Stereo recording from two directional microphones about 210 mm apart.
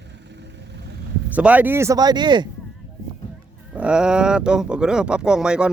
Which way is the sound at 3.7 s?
5° right (ahead or behind).